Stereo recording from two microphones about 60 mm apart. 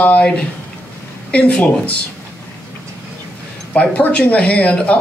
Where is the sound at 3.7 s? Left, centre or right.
Left.